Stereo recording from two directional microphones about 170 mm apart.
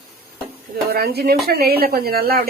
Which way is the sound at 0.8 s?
65° right (ahead or behind).